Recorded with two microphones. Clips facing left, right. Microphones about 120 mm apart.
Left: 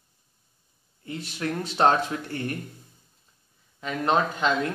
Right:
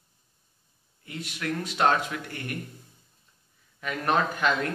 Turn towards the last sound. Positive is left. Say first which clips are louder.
# left 1 dB
turn(degrees=20)  # may be behind; listen again after turning